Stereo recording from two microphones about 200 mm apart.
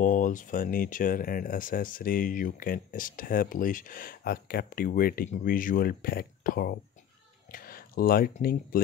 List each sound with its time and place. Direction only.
0.0 s speech: 40° left (ahead or behind)